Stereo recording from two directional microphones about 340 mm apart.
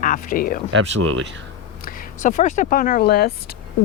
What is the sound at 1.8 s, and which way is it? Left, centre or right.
Speech, left.